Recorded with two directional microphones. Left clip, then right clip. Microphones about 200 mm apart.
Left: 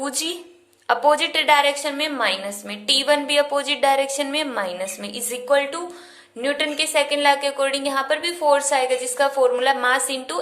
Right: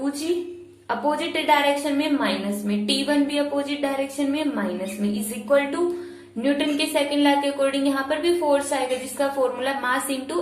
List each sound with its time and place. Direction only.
0.9 s a woman's voice: 50° left (ahead or behind)
6.4 s a woman's voice: 40° left (ahead or behind)